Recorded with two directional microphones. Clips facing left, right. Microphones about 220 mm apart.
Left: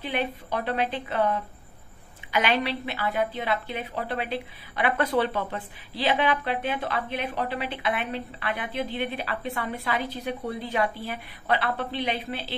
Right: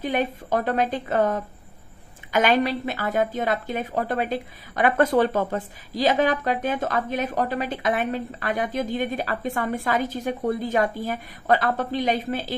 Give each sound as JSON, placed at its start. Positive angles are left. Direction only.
{"t": 0.0, "sound": "a woman's voice", "side_deg": -45}